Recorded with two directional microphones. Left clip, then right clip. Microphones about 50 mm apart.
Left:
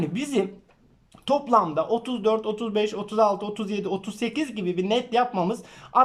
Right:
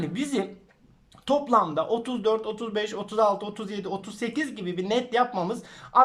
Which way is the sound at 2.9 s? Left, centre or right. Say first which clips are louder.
Right 1 dB; centre.